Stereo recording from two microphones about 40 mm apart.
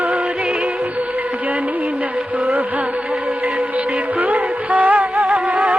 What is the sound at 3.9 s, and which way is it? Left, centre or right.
Music, right.